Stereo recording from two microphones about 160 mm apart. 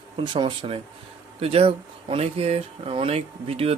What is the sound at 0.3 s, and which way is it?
Speech, 30° right (ahead or behind).